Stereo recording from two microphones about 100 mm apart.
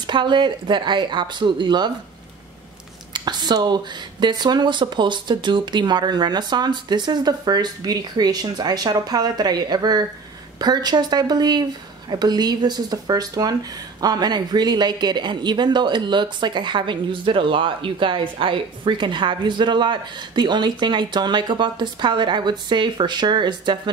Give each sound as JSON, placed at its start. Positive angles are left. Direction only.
{"t": 0.0, "sound": "speech", "side_deg": -50}
{"t": 3.1, "sound": "speech", "side_deg": -45}